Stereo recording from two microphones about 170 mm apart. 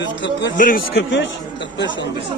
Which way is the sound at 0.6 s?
60° left (ahead or behind).